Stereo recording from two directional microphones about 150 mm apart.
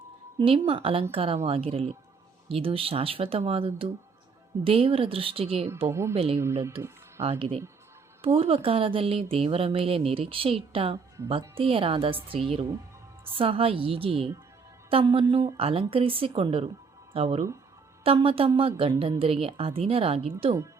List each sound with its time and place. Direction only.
0.3 s speech: 35° right (ahead or behind)
5.9 s speech: 20° right (ahead or behind)
6.1 s speech: 40° right (ahead or behind)
6.4 s speech: 20° right (ahead or behind)
7.3 s speech: 40° right (ahead or behind)